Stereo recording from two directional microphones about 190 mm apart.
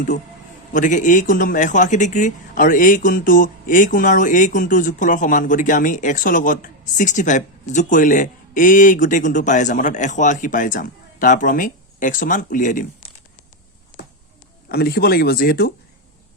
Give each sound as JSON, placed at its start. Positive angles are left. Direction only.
{"t": 0.7, "sound": "speech", "side_deg": 40}
{"t": 14.7, "sound": "speech", "side_deg": 55}